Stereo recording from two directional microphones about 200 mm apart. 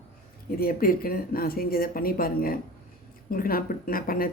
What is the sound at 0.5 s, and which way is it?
Speech, 45° left (ahead or behind).